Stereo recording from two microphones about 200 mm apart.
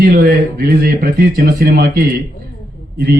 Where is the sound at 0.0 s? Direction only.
50° right (ahead or behind).